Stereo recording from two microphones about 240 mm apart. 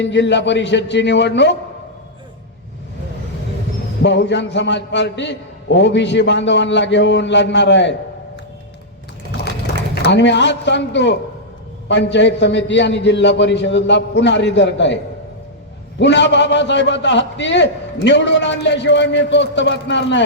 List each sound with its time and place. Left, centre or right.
0.0 s a man's voice: left
4.0 s a man's voice: left
9.9 s a man's voice: left
16.0 s a man's voice: left